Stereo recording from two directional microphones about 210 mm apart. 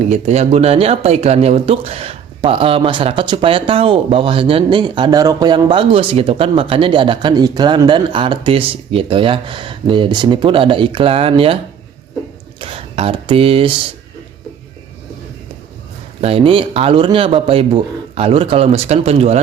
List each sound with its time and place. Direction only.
0.0 s speech: 30° right (ahead or behind)
12.5 s a sound: 25° right (ahead or behind)
16.2 s speech: 25° right (ahead or behind)